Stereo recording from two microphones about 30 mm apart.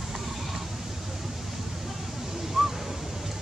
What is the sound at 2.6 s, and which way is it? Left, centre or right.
Crow, centre.